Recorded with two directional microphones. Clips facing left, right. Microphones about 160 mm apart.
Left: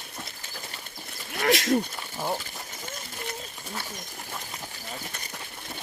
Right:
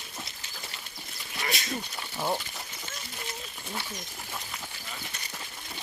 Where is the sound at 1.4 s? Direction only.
90° left.